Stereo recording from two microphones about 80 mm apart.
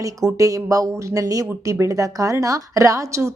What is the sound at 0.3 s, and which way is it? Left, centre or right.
Speech, right.